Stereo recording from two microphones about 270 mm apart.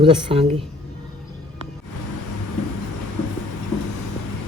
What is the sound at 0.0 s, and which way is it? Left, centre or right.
Speech, centre.